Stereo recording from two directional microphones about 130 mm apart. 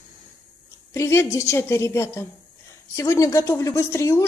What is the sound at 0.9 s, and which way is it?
Speech, 20° left (ahead or behind).